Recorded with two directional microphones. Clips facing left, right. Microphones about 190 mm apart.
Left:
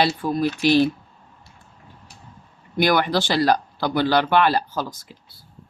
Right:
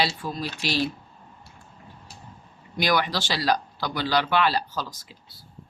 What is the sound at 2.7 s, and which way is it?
Speech, 55° left (ahead or behind).